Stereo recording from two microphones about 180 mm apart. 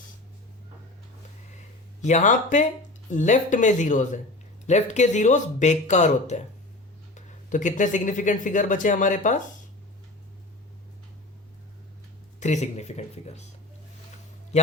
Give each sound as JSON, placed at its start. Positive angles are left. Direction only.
{"t": 2.0, "sound": "speech", "side_deg": 40}
{"t": 12.4, "sound": "speech", "side_deg": 40}